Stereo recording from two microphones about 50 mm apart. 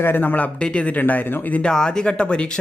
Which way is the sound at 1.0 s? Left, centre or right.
Left.